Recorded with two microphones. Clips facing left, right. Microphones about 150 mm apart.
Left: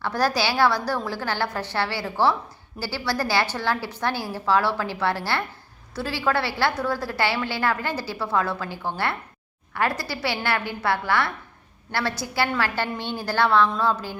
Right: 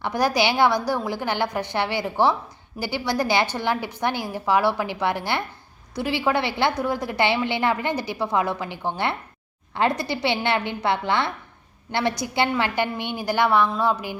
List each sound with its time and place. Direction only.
0.0 s a woman's voice: 15° right (ahead or behind)